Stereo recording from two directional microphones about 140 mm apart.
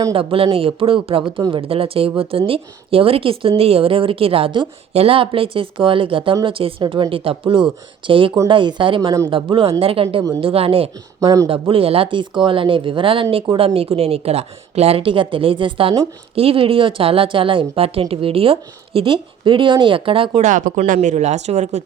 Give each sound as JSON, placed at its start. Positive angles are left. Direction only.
{"t": 0.1, "sound": "a woman's voice", "side_deg": -40}
{"t": 11.2, "sound": "speech", "side_deg": -25}
{"t": 11.7, "sound": "a woman's voice", "side_deg": -40}
{"t": 20.4, "sound": "speech", "side_deg": -65}